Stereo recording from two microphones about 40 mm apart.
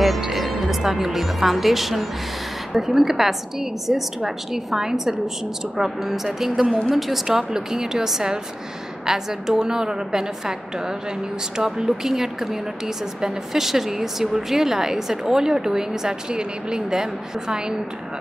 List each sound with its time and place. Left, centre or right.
0.0 s speech: centre